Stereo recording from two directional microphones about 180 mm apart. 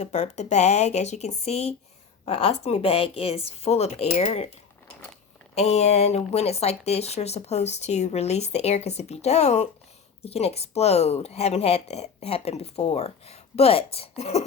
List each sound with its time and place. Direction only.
0.0 s speech: 40° left (ahead or behind)
5.5 s speech: 35° left (ahead or behind)